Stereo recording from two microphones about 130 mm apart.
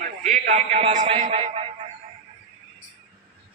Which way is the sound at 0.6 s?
55° right (ahead or behind).